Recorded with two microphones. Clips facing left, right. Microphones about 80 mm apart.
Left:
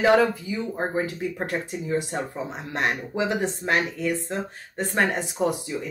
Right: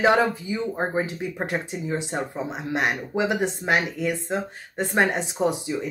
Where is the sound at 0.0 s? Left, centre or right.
Right.